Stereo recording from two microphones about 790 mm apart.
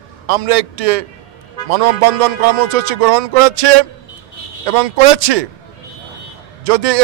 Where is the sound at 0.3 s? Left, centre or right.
Right.